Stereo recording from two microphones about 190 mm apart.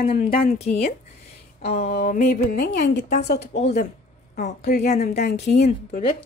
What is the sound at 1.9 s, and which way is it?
Speech, 45° left (ahead or behind).